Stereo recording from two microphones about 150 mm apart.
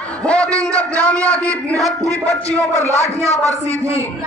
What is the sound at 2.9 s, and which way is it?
A man's voice, 45° left (ahead or behind).